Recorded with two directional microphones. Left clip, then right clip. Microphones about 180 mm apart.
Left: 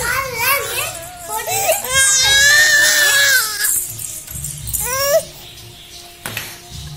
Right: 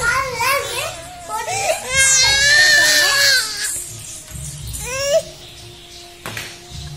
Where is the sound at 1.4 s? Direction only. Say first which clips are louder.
Left 3 dB; 30° left (ahead or behind).